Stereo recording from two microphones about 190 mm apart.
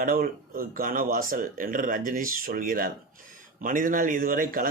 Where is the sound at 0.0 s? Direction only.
50° right (ahead or behind).